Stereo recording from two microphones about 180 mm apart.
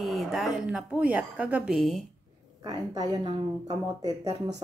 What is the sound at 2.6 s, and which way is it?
Speech, 20° right (ahead or behind).